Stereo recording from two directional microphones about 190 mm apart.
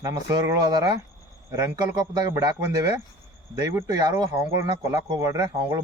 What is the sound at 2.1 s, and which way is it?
Speech, 20° right (ahead or behind).